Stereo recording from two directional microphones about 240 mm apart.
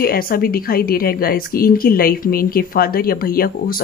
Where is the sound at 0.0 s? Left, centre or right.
Left.